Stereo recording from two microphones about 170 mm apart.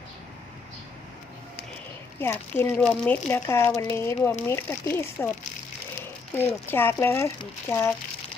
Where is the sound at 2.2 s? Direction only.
15° left (ahead or behind).